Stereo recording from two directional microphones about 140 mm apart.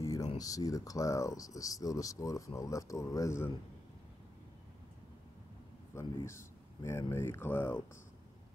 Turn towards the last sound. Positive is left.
turn(degrees=15)  # may be behind; listen again after turning